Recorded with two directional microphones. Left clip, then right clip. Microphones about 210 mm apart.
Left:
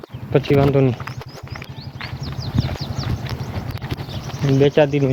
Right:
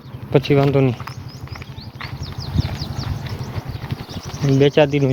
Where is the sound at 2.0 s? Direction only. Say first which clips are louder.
Left 1 dB; 15° right (ahead or behind).